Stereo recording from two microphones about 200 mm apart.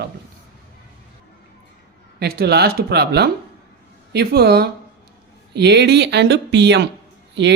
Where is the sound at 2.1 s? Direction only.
50° right (ahead or behind).